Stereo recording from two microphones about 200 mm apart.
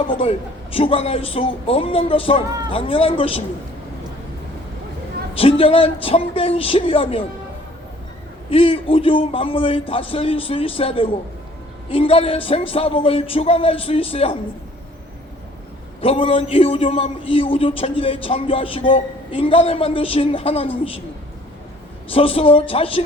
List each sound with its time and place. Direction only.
0.2 s a man's voice: 30° left (ahead or behind)
5.3 s a man's voice: 30° left (ahead or behind)
8.4 s a man's voice: 30° left (ahead or behind)
16.0 s a man's voice: 25° left (ahead or behind)
22.1 s a man's voice: 30° left (ahead or behind)